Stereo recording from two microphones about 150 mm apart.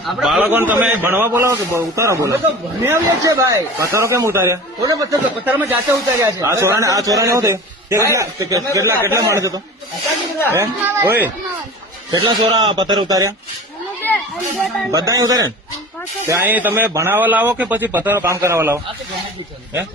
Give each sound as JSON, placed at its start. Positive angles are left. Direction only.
{"t": 0.0, "sound": "a man's voice", "side_deg": 0}
{"t": 10.5, "sound": "a man's voice", "side_deg": -15}
{"t": 12.1, "sound": "a man's voice", "side_deg": -30}
{"t": 14.0, "sound": "children playing", "side_deg": 15}
{"t": 14.9, "sound": "a man's voice", "side_deg": -25}